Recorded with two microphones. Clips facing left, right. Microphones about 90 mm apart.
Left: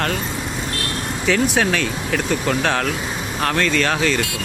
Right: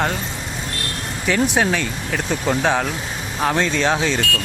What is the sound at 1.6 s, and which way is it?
Speech, 5° right (ahead or behind).